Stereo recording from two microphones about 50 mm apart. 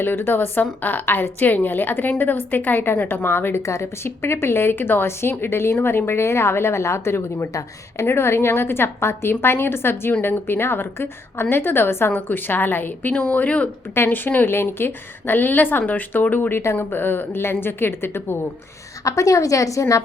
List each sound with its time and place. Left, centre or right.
0.0 s a woman's voice: left
3.7 s a woman's voice: left
5.7 s speech: left
8.0 s a woman's voice: left
13.9 s a woman's voice: left
19.1 s a woman's voice: left